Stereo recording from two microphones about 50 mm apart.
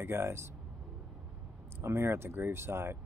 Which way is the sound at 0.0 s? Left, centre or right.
Right.